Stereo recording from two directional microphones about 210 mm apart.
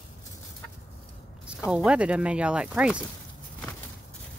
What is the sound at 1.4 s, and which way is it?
Speech, 5° right (ahead or behind).